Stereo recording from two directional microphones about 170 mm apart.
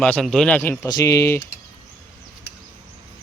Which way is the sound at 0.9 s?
20° left (ahead or behind).